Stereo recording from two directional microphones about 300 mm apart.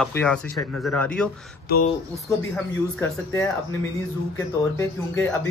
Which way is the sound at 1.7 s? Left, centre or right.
Left.